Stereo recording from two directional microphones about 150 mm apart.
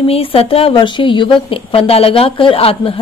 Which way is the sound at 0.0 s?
40° left (ahead or behind).